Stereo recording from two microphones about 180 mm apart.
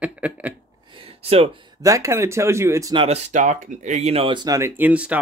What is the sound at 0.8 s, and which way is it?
Speech, 30° right (ahead or behind).